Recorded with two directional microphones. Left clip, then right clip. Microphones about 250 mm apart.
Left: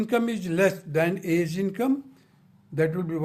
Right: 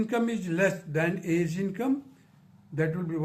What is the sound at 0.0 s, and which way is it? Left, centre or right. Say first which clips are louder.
Speech: left 3 dB; left.